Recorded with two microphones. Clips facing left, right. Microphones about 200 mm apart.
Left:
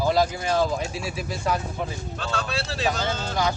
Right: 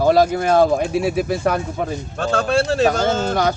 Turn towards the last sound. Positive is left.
turn(degrees=-55)  # may be behind; listen again after turning